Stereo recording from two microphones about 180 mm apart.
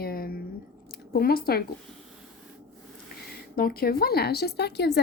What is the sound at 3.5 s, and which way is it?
A woman's voice, 55° left (ahead or behind).